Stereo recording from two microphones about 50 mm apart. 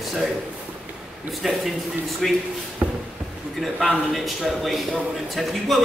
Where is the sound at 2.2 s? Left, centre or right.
Centre.